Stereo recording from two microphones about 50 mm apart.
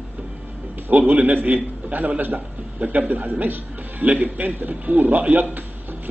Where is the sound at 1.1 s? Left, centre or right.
Right.